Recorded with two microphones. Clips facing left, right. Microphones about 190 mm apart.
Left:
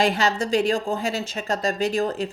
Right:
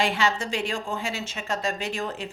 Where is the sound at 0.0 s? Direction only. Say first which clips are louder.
Left 4 dB; 40° left (ahead or behind).